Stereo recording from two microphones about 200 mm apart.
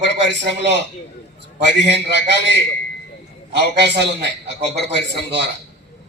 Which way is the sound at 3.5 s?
55° right (ahead or behind).